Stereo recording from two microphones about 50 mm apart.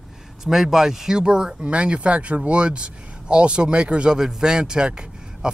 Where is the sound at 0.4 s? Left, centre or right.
Centre.